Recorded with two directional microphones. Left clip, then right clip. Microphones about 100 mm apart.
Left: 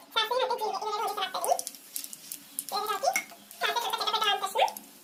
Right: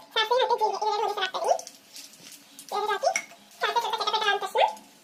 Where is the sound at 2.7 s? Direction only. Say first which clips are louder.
Right 3 dB; 35° right (ahead or behind).